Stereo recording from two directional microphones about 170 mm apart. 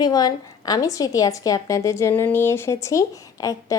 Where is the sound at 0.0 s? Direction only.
25° left (ahead or behind).